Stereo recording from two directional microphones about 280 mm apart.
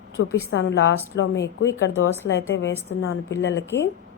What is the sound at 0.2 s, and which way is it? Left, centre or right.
A woman's voice, left.